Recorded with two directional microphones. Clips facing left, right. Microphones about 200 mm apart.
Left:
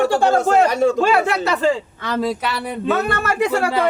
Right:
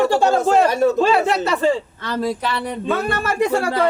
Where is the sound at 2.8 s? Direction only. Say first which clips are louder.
Left 3 dB; 70° left (ahead or behind).